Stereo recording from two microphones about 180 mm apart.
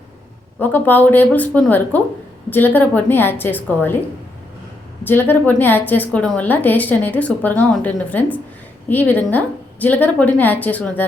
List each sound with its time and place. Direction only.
0.6 s a woman's voice: 10° left (ahead or behind)
5.0 s a woman's voice: 10° left (ahead or behind)